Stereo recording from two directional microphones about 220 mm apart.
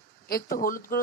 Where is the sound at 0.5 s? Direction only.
40° left (ahead or behind).